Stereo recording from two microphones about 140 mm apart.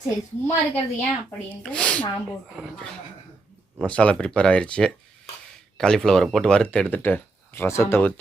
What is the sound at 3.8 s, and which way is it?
Speech, 10° left (ahead or behind).